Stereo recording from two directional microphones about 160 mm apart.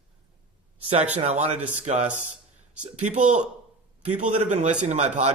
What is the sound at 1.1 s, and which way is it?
Speech, 45° right (ahead or behind).